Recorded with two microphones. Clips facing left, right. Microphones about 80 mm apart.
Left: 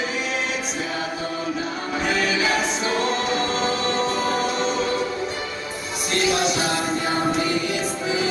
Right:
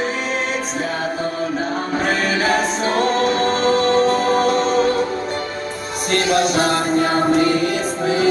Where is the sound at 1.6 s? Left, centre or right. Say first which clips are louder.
Right 5 dB; right.